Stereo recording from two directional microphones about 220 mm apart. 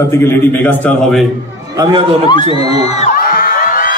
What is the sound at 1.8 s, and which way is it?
Speech, 25° right (ahead or behind).